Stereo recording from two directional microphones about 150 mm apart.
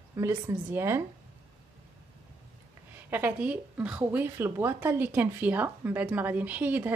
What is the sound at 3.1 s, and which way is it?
Speech, 15° right (ahead or behind).